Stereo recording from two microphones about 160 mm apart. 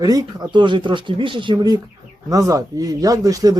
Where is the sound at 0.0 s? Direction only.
25° right (ahead or behind).